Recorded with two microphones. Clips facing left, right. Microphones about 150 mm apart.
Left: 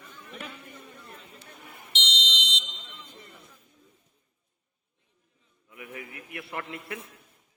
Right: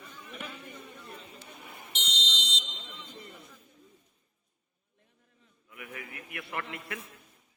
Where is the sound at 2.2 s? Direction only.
70° left (ahead or behind).